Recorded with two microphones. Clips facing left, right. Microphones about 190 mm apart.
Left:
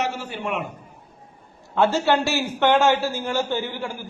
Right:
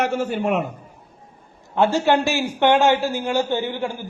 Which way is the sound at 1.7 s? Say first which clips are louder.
Right 2 dB; 15° right (ahead or behind).